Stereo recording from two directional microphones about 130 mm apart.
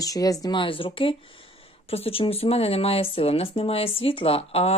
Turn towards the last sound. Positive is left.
turn(degrees=50)  # may be behind; listen again after turning